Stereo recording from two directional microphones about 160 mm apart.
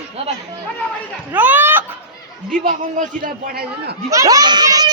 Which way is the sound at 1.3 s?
10° right (ahead or behind).